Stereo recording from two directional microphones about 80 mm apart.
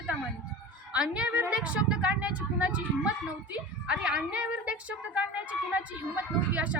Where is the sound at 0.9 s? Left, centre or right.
Centre.